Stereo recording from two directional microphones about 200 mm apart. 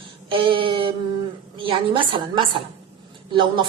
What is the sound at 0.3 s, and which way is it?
Speech, 25° right (ahead or behind).